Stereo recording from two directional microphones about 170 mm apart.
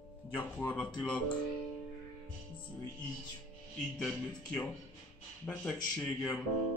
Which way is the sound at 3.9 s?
5° left (ahead or behind).